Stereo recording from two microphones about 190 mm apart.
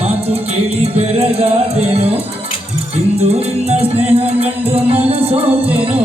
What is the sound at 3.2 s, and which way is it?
Music, 35° right (ahead or behind).